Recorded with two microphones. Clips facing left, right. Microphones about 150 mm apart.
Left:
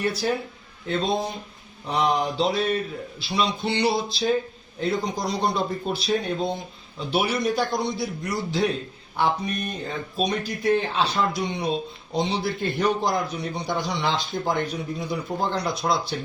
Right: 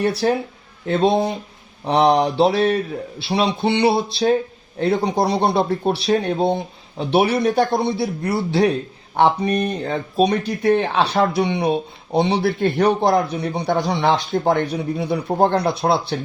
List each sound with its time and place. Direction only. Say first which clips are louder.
0.0 s mantra: right 6 dB; 70° right (ahead or behind)
0.9 s speech: right 8 dB; 65° right (ahead or behind)
1.8 s mantra: right 8 dB; 70° right (ahead or behind)
3.2 s speech: right 6 dB; 65° right (ahead or behind)